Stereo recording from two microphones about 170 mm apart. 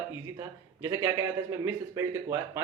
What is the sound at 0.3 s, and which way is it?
Speech, 15° right (ahead or behind).